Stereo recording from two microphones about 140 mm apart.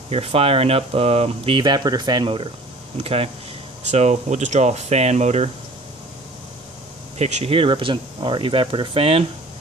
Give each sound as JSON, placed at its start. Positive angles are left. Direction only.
{"t": 0.1, "sound": "speech", "side_deg": -45}
{"t": 7.2, "sound": "speech", "side_deg": -50}